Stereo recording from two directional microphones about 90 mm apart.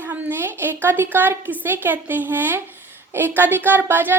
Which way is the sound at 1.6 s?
25° right (ahead or behind).